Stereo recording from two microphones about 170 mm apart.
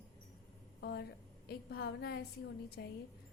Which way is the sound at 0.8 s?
70° left (ahead or behind).